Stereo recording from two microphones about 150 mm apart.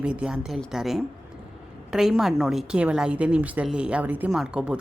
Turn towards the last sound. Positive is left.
turn(degrees=-5)  # may be behind; listen again after turning